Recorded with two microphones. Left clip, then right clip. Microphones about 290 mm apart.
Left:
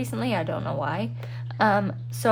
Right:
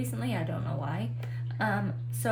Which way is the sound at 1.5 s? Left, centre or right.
Centre.